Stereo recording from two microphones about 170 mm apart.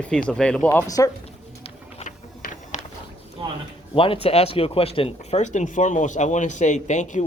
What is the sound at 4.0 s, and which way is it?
Speech, 35° left (ahead or behind).